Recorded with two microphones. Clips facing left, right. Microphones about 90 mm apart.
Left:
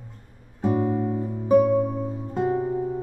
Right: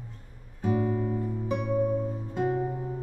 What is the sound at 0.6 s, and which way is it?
Music, 35° left (ahead or behind).